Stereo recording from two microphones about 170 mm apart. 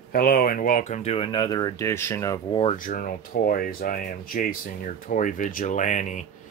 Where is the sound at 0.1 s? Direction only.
60° left (ahead or behind); by 2.4 s 15° left (ahead or behind).